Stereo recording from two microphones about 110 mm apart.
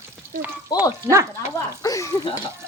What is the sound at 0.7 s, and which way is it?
Speech, 35° left (ahead or behind).